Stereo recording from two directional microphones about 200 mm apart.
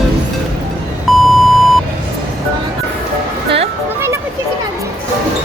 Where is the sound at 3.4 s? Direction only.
30° right (ahead or behind).